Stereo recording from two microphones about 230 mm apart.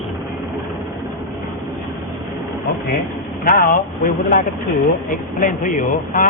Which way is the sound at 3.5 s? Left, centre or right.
Left.